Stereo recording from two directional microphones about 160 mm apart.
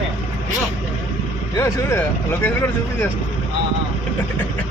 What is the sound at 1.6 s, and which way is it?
Speech, 15° left (ahead or behind).